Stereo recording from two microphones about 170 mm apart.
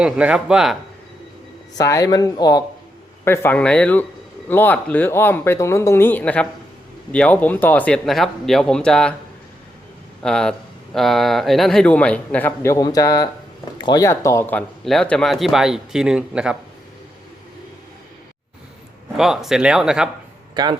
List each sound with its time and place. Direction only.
0.0 s speech: 5° right (ahead or behind)
1.8 s a man's voice: 20° left (ahead or behind)
10.2 s a man's voice: 5° left (ahead or behind)
19.1 s speech: centre (ahead or behind)
20.6 s speech: 25° right (ahead or behind)